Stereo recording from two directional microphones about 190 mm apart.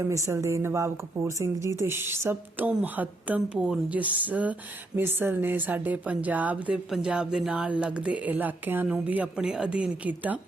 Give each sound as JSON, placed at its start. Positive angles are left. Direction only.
{"t": 0.0, "sound": "speech", "side_deg": -15}